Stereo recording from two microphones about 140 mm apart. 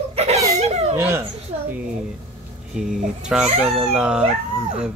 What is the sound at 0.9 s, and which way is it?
Speech, 15° right (ahead or behind).